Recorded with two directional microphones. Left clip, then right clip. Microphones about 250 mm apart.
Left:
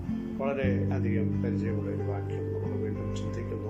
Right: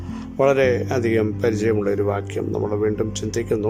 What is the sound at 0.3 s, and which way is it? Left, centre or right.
Speech, right.